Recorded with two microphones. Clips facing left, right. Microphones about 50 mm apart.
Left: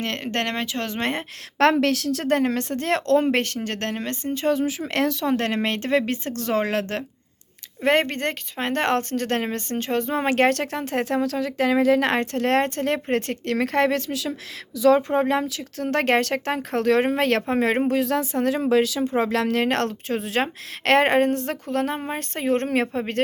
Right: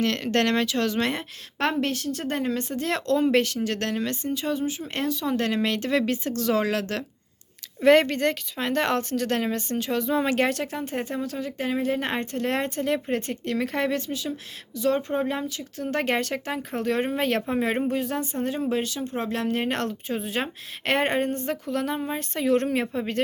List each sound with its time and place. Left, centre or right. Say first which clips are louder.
0.0 s speech: right 3 dB; left
1.5 s speech: left 7 dB; left
2.8 s speech: left 4 dB; left
4.5 s speech: left 5 dB; left
5.2 s a woman's voice: left 2 dB; left
15.2 s speech: left 5 dB; left
21.7 s speech: left 3 dB; left